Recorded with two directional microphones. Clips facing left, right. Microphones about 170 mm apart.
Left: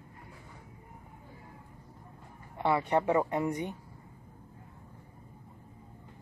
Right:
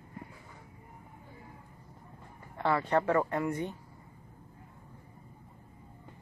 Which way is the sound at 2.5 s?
15° left (ahead or behind).